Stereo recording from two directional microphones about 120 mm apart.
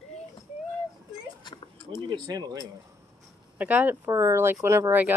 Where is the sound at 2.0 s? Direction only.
35° right (ahead or behind).